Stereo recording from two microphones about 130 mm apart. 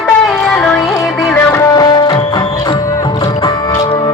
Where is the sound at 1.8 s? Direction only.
30° left (ahead or behind).